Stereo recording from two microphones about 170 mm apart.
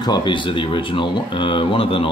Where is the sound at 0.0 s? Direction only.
25° left (ahead or behind).